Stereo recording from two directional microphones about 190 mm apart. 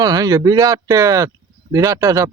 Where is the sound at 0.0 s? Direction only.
20° right (ahead or behind).